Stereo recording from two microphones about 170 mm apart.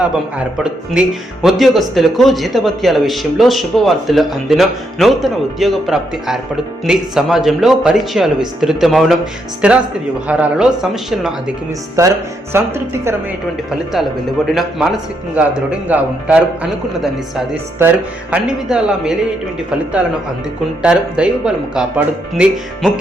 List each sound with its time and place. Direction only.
0.0 s a man's voice: 5° right (ahead or behind)
12.0 s a man's voice: 15° right (ahead or behind)
13.7 s speech: centre (ahead or behind)
15.4 s a man's voice: 10° right (ahead or behind)